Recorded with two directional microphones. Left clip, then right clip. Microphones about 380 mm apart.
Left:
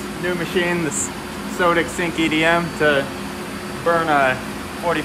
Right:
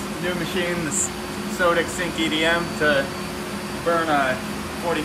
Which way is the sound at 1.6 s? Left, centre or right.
Left.